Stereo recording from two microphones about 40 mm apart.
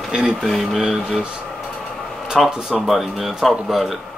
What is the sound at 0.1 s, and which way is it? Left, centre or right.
Speech, centre.